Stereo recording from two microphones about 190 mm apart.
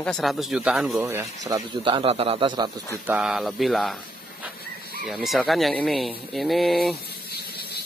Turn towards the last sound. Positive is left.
turn(degrees=0)  # may be behind; listen again after turning